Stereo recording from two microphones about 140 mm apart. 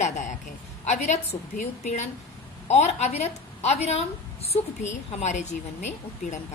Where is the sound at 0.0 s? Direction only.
60° left (ahead or behind).